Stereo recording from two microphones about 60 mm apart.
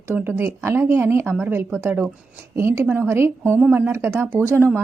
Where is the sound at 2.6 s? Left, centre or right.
Right.